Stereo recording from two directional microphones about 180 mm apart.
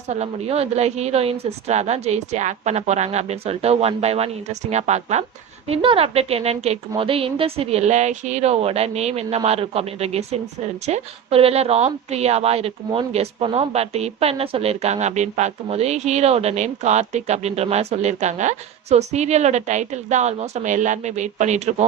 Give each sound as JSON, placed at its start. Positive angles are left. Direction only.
{"t": 0.1, "sound": "a woman's voice", "side_deg": -35}